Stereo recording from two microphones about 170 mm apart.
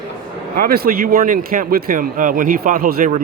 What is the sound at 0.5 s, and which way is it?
A man's voice, 60° right (ahead or behind).